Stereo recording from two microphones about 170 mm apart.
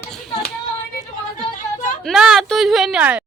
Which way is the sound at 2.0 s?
5° right (ahead or behind).